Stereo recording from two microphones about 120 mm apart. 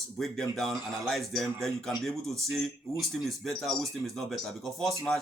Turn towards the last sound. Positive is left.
turn(degrees=5)  # may be behind; listen again after turning